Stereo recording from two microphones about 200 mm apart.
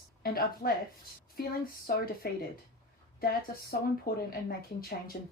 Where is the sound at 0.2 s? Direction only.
50° left (ahead or behind).